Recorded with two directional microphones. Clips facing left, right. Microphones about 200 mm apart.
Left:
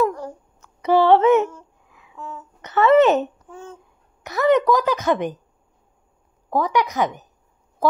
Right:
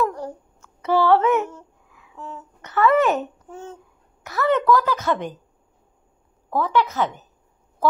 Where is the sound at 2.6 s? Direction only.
20° left (ahead or behind).